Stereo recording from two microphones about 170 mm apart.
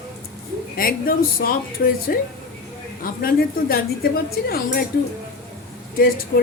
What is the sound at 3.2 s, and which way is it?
Speech, 60° left (ahead or behind).